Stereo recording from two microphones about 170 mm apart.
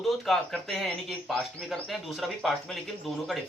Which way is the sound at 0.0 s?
Centre (ahead or behind).